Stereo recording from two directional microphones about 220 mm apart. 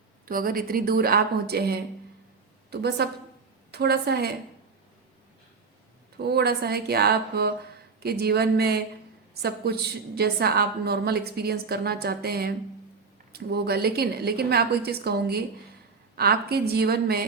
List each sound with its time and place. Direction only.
0.3 s a woman's voice: 40° right (ahead or behind)
6.1 s a woman's voice: 45° right (ahead or behind)